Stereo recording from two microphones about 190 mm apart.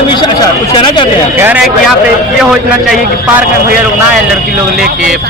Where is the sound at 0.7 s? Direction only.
25° left (ahead or behind).